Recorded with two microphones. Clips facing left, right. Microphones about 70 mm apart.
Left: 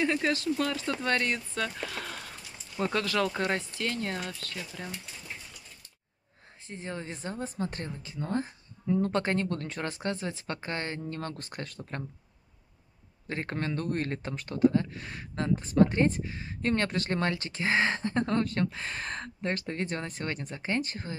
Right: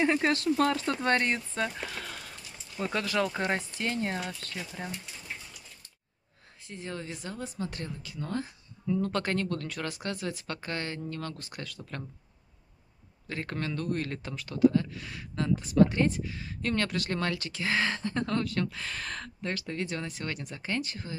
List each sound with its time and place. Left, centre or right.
0.0 s speech: right
0.3 s speech: right
2.9 s speech: centre
6.7 s speech: left
13.3 s speech: left